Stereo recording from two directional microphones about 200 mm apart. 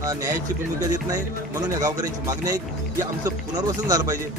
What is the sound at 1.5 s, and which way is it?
Speech, 20° right (ahead or behind).